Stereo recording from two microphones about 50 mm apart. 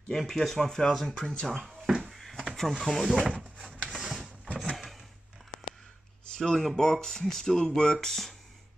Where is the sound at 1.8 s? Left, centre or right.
Centre.